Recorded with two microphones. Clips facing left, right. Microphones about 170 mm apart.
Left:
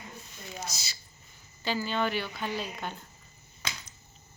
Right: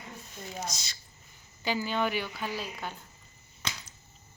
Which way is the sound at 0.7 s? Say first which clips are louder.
Right 1 dB; 5° left (ahead or behind).